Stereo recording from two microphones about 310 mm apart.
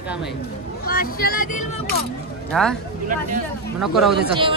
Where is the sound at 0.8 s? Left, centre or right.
Left.